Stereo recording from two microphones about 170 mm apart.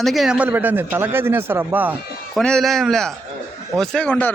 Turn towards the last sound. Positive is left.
turn(degrees=5)  # may be behind; listen again after turning